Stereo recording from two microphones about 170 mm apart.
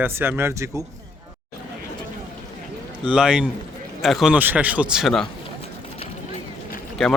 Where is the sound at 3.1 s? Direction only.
5° right (ahead or behind).